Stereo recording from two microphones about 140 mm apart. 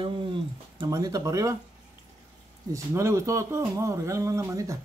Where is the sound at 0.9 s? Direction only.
25° right (ahead or behind).